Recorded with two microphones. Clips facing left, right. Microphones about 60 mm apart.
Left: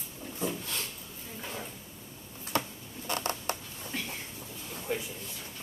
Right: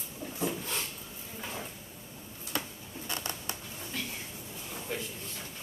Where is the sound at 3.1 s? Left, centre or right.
Left.